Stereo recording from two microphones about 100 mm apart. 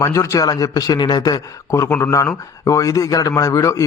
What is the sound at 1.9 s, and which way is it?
A man's voice, 25° left (ahead or behind).